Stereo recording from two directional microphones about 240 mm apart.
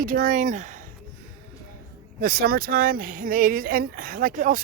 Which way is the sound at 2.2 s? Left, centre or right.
Right.